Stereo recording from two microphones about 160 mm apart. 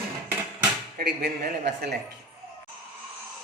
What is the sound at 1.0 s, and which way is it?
Speech, 80° right.